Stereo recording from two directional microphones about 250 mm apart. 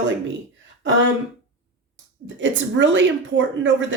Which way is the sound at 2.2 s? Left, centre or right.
Right.